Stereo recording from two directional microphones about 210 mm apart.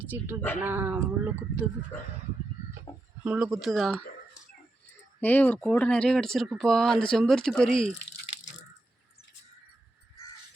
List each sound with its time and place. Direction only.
0.0 s speech: 10° right (ahead or behind)
2.9 s a sound: 15° left (ahead or behind)
3.2 s speech: 5° right (ahead or behind)
5.2 s speech: 10° left (ahead or behind)